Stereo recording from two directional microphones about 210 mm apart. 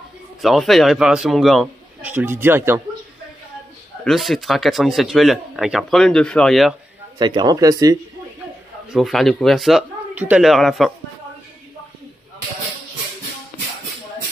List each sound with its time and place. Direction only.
0.4 s speech: centre (ahead or behind)
4.0 s speech: centre (ahead or behind)
7.2 s speech: 20° right (ahead or behind)
8.9 s speech: centre (ahead or behind)